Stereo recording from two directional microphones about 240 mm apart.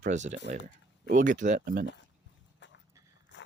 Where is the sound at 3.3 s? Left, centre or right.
Left.